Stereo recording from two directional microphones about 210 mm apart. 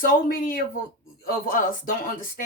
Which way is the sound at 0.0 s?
40° left (ahead or behind).